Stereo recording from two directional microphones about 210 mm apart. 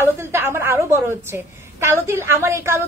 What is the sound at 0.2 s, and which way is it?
A woman's voice, 10° right (ahead or behind).